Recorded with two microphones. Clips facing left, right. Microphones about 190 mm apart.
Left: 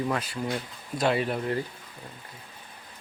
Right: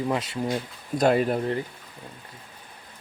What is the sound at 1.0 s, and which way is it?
Speech, 45° right (ahead or behind).